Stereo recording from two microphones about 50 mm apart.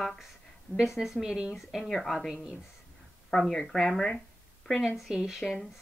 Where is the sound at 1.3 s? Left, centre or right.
Centre.